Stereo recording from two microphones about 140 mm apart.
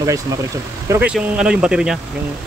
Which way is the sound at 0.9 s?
15° right (ahead or behind).